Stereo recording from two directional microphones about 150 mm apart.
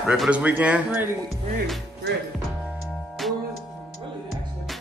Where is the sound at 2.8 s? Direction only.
Centre (ahead or behind).